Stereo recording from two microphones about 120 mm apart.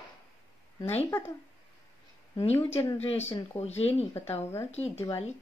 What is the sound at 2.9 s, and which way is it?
Speech, 60° left (ahead or behind).